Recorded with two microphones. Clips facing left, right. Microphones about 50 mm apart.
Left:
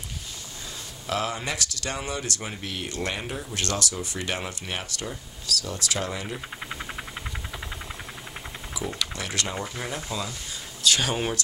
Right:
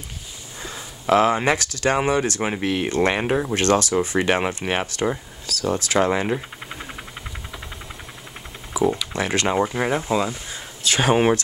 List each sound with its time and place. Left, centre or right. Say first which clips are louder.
1.0 s speech: right 12 dB; right
2.4 s speech: right 11 dB; right
3.2 s speech: right 12 dB; right
3.5 s speech: right 9 dB; right
4.6 s speech: right 10 dB; right
5.5 s speech: right 8 dB; right
6.7 s a sound: right 1 dB; centre
9.1 s speech: right 9 dB; right